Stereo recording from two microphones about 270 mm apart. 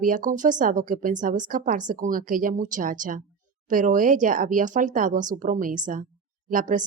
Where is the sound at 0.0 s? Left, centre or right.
Right.